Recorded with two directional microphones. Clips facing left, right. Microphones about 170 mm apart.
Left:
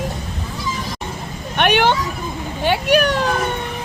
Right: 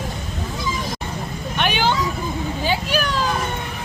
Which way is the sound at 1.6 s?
65° left (ahead or behind).